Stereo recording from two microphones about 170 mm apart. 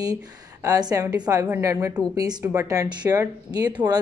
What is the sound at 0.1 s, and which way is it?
Speech, 20° right (ahead or behind).